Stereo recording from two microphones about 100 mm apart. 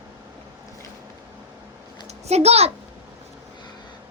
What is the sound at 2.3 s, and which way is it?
Speech, 90° right.